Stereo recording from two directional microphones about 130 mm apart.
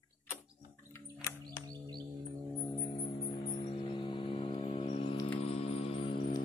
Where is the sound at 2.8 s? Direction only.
45° left (ahead or behind).